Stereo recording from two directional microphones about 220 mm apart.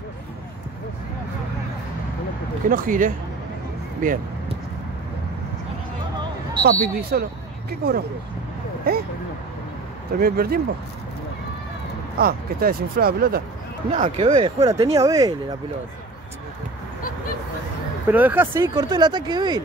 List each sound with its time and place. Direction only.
2.7 s speech: 35° right (ahead or behind)
6.6 s speech: 40° right (ahead or behind)
10.2 s speech: 45° right (ahead or behind)
12.2 s speech: 45° right (ahead or behind)
13.9 s speech: 35° right (ahead or behind)
14.3 s speech: 20° right (ahead or behind)
18.0 s speech: 10° right (ahead or behind)